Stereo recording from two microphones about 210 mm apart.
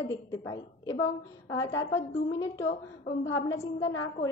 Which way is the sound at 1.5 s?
15° left (ahead or behind).